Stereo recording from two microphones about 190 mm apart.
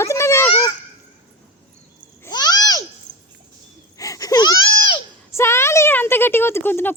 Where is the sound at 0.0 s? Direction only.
15° left (ahead or behind).